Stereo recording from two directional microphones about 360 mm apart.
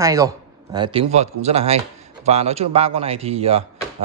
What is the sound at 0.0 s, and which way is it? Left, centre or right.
Speech, centre.